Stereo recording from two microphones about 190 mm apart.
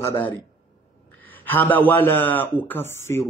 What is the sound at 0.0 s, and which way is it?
A man's voice, 10° left (ahead or behind).